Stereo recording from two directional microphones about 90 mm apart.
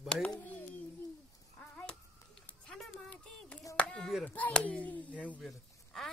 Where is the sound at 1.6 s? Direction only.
20° left (ahead or behind).